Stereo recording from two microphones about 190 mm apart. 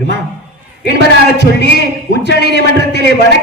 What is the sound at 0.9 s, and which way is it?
A man's voice, 60° right (ahead or behind).